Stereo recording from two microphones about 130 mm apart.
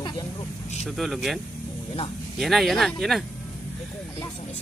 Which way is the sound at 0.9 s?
Centre (ahead or behind).